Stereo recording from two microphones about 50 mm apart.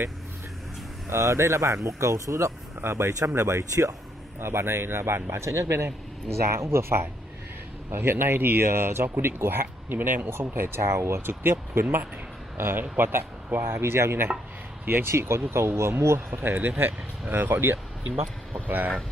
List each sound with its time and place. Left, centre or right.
1.1 s speech: right
2.8 s speech: right
4.4 s a man's voice: right
10.8 s speech: right
11.1 s a man's voice: right
16.3 s speech: right